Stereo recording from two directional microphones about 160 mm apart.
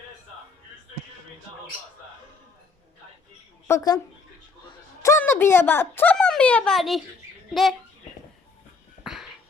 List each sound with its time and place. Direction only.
3.7 s speech: 20° left (ahead or behind)
5.0 s speech: 15° left (ahead or behind); by 7.8 s centre (ahead or behind)
9.0 s a sound: centre (ahead or behind)